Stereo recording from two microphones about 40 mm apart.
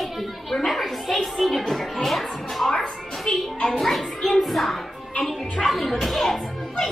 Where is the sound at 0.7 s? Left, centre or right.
Centre.